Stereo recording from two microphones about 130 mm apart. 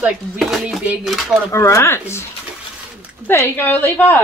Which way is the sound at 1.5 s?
20° left (ahead or behind).